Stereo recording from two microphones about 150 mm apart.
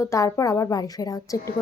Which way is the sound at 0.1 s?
20° left (ahead or behind).